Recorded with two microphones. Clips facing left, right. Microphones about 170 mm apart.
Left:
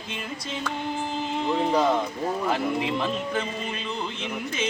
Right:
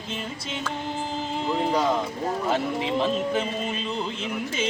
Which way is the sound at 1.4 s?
Centre (ahead or behind).